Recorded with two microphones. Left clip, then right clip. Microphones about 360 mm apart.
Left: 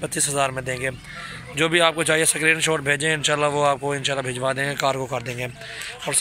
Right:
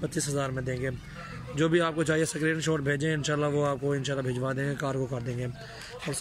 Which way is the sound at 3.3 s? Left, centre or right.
Left.